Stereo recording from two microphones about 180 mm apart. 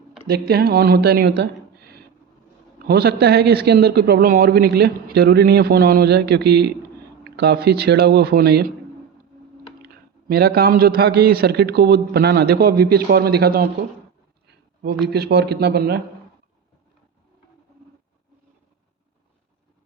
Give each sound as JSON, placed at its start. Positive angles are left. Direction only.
{"t": 0.3, "sound": "speech", "side_deg": -60}
{"t": 1.4, "sound": "a sound", "side_deg": -60}
{"t": 2.7, "sound": "speech", "side_deg": -60}
{"t": 9.8, "sound": "speech", "side_deg": -60}
{"t": 15.1, "sound": "speech", "side_deg": -60}